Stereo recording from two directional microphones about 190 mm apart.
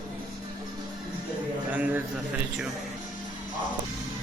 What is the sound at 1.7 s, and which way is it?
Speech, 10° right (ahead or behind).